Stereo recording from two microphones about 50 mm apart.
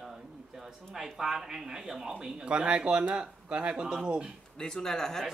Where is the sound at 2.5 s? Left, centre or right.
Right.